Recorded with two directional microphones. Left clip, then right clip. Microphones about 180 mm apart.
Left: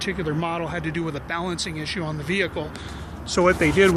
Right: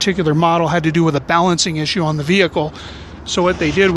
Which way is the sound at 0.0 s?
55° right (ahead or behind).